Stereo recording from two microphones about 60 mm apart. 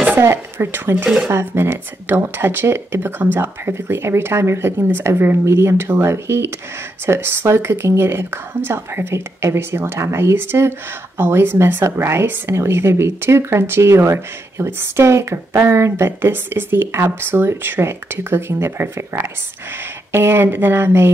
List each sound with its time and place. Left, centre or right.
0.1 s speech: right
1.0 s speech: centre
1.3 s speech: right
5.4 s a woman's voice: right